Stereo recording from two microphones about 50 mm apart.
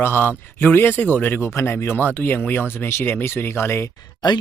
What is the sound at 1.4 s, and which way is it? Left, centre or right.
Speech, left.